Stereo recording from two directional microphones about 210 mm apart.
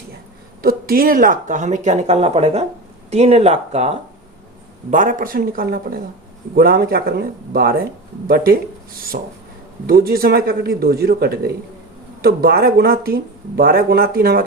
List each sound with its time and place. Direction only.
0.6 s speech: 45° right (ahead or behind)
9.1 s speech: 45° right (ahead or behind)